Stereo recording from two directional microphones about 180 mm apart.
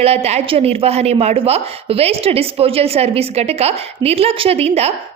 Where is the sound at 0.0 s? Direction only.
35° right (ahead or behind).